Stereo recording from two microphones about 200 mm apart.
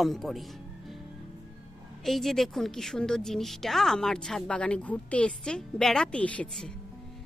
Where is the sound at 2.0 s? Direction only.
Centre (ahead or behind).